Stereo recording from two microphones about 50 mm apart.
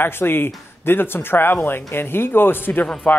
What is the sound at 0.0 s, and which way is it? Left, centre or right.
Speech, left.